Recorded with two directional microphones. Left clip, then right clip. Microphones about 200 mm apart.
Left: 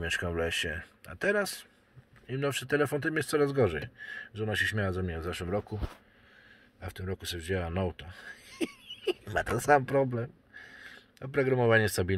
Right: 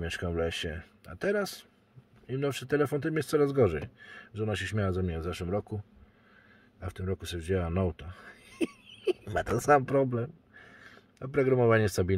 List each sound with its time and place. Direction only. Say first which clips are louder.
0.0 s speech: left 1 dB; 20° right (ahead or behind)
6.8 s speech: right 2 dB; 30° right (ahead or behind)